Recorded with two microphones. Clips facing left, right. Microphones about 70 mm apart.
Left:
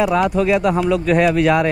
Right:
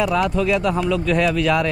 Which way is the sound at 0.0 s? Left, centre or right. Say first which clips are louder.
Left 3 dB; centre.